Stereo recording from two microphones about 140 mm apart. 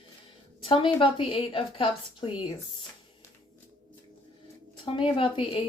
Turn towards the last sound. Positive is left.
turn(degrees=40)  # may be behind; listen again after turning